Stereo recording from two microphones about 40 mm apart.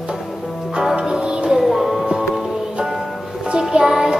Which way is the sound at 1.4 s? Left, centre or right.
Centre.